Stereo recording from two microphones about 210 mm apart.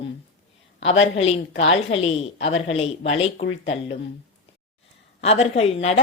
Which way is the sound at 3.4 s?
65° left (ahead or behind).